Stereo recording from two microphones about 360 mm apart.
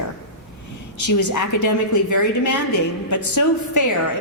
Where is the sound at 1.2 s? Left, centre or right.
Left.